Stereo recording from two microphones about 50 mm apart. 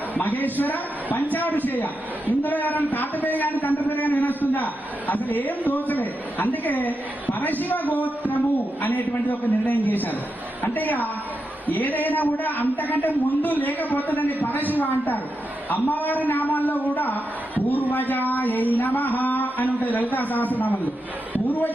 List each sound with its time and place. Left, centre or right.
0.1 s a man's voice: left